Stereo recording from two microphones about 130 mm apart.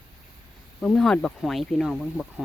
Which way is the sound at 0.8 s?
5° left (ahead or behind).